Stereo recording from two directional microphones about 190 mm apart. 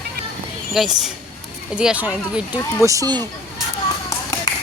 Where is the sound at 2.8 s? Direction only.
15° right (ahead or behind).